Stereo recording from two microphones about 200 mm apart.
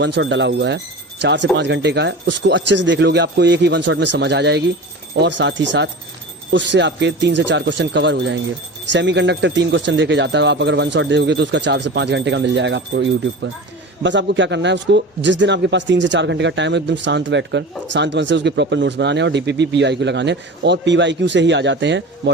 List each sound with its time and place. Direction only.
0.0 s a man's voice: 60° right (ahead or behind)